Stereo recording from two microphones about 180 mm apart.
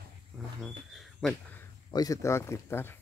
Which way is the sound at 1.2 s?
Centre (ahead or behind).